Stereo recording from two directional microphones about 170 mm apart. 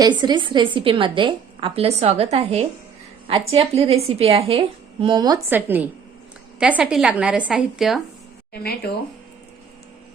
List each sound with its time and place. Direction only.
0.0 s a woman's voice: 25° right (ahead or behind)
5.5 s a woman's voice: 10° right (ahead or behind)
8.5 s speech: 65° left (ahead or behind)